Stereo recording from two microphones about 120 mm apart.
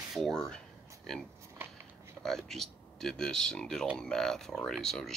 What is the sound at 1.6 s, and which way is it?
Biting, 15° right (ahead or behind).